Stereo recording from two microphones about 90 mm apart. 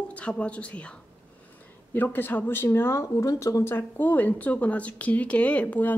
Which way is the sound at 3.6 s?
25° left (ahead or behind).